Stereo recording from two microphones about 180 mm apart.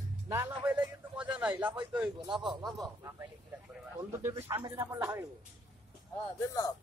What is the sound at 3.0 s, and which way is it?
Speech, 15° right (ahead or behind).